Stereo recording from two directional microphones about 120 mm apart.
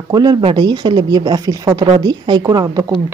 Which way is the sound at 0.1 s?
35° right (ahead or behind).